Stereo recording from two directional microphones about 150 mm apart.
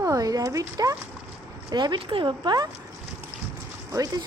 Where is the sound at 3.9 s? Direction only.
25° right (ahead or behind).